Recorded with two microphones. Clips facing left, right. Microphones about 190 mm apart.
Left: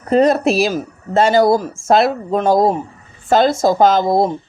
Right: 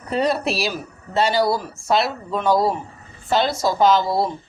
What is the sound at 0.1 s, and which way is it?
Speech, 45° left (ahead or behind).